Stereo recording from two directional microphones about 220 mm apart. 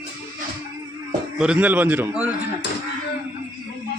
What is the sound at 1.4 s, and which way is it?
Speech, 5° right (ahead or behind).